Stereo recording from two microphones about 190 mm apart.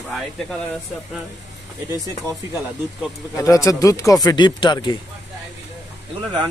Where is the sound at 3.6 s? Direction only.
15° left (ahead or behind).